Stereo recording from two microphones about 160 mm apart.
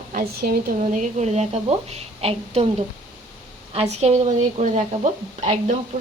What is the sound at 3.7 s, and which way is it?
A woman's voice, 40° right (ahead or behind).